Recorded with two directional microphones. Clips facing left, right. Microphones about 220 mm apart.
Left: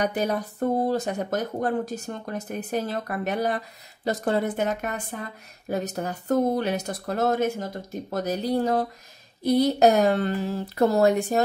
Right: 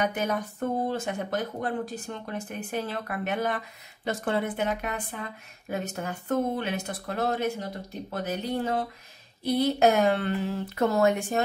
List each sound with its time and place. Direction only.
0.0 s speech: 35° left (ahead or behind)